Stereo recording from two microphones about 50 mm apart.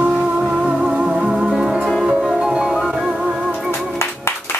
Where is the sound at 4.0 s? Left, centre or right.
Left.